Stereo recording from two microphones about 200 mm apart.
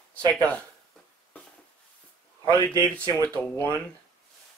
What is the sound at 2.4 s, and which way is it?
Speech, 20° right (ahead or behind).